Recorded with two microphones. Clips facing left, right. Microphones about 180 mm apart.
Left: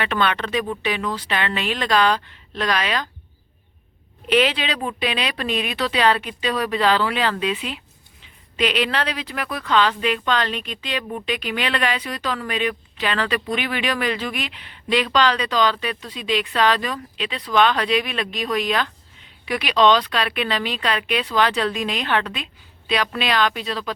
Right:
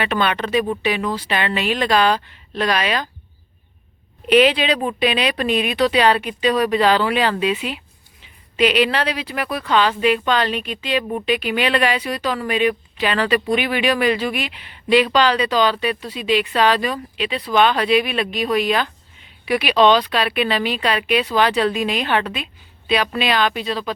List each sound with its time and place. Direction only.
0.0 s speech: 5° right (ahead or behind)
4.3 s speech: 15° right (ahead or behind)